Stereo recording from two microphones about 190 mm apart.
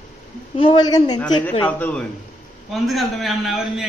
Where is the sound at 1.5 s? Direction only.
10° left (ahead or behind).